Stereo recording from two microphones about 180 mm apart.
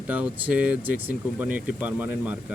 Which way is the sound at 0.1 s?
10° right (ahead or behind).